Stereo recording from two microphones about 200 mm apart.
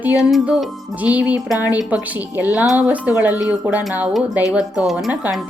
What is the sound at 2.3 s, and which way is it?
A woman's voice, 10° right (ahead or behind).